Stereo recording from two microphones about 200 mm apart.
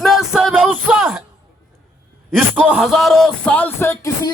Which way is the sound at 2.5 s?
5° right (ahead or behind).